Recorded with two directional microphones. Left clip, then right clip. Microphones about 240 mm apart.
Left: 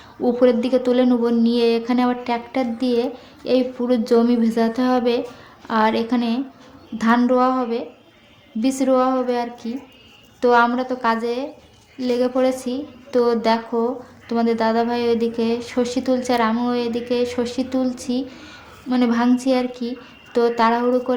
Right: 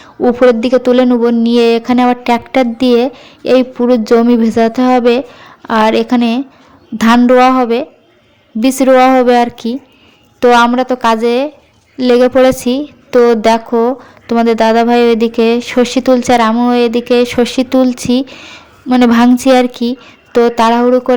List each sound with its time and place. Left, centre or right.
0.0 s a woman's voice: right